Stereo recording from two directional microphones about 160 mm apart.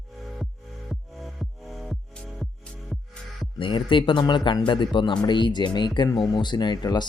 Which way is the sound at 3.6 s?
30° left (ahead or behind).